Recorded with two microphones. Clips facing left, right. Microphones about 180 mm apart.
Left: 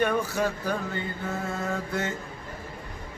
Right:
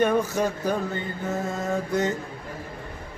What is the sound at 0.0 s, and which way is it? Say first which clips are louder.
Speech: right 3 dB; 20° right (ahead or behind).